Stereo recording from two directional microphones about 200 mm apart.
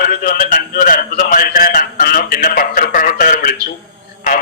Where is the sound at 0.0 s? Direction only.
45° left (ahead or behind).